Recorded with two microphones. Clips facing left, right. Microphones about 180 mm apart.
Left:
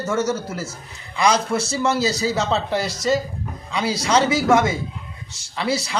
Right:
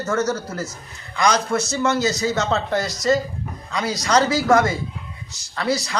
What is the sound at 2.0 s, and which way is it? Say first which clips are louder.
Speech: even; 30° left (ahead or behind).